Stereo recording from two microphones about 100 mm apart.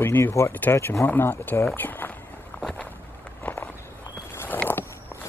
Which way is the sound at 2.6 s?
5° left (ahead or behind).